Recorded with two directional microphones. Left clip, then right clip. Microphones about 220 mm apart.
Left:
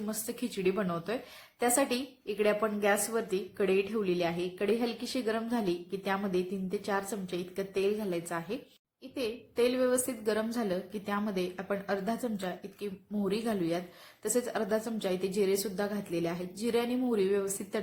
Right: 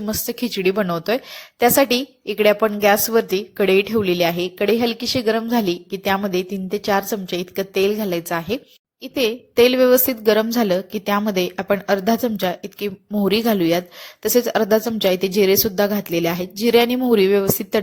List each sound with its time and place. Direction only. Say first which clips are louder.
0.0 s a woman's voice: right 13 dB; 35° right (ahead or behind)